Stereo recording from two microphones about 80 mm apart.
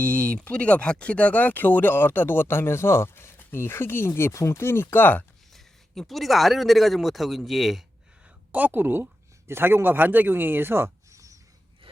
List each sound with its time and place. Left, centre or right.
0.0 s speech: centre
5.5 s speech: centre
8.5 s speech: right